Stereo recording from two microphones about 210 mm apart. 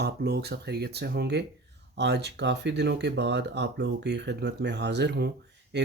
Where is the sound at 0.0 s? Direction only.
50° right (ahead or behind).